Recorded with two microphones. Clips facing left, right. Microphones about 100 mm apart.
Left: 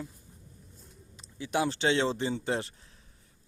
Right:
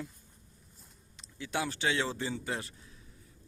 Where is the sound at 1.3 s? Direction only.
20° left (ahead or behind).